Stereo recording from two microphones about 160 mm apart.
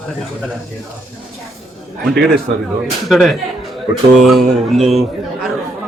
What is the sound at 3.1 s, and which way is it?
A man's voice, centre (ahead or behind).